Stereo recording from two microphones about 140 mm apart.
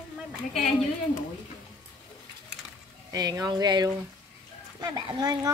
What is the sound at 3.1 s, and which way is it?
A child's voice, 25° right (ahead or behind).